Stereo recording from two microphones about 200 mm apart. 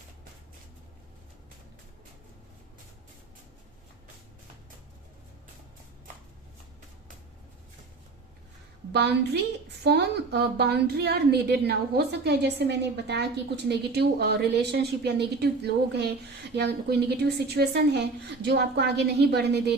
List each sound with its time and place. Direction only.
8.9 s a woman's voice: 55° right (ahead or behind)